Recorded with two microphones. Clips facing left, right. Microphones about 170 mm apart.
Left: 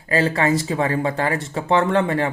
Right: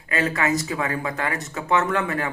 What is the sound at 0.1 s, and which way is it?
Speech, 30° left (ahead or behind).